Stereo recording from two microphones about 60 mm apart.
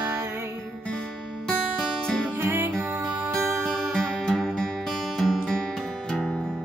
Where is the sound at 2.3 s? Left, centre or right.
Right.